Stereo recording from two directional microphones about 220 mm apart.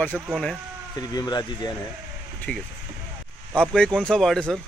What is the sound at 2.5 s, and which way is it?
Speech, 5° left (ahead or behind).